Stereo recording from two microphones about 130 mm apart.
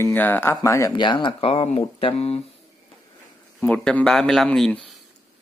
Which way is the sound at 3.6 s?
10° left (ahead or behind).